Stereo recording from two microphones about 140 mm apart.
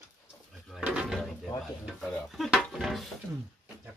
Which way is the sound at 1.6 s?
Centre (ahead or behind).